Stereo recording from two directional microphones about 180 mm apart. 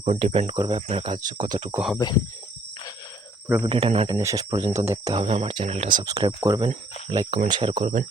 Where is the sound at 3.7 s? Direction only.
30° right (ahead or behind).